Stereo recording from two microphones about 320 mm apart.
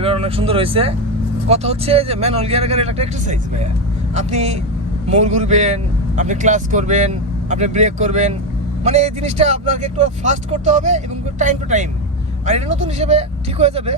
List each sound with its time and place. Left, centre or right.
0.0 s speech: centre